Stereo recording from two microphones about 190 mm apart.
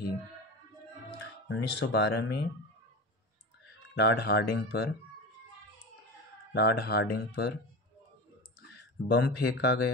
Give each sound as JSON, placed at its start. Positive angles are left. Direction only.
{"t": 1.5, "sound": "speech", "side_deg": 65}
{"t": 3.9, "sound": "speech", "side_deg": 60}
{"t": 6.5, "sound": "speech", "side_deg": 60}
{"t": 9.0, "sound": "speech", "side_deg": 65}